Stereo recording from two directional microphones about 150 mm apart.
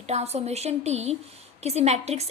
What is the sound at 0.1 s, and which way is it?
A woman's voice, 45° right (ahead or behind).